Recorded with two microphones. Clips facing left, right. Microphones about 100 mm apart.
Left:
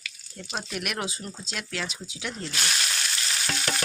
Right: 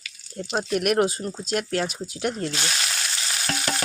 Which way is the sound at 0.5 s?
40° right (ahead or behind).